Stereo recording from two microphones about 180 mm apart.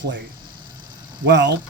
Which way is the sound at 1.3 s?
75° right (ahead or behind).